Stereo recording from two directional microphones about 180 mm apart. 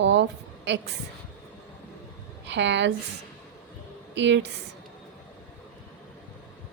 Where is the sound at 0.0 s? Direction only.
75° right (ahead or behind).